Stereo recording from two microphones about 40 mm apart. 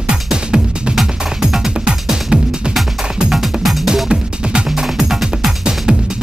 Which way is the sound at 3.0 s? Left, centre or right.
Centre.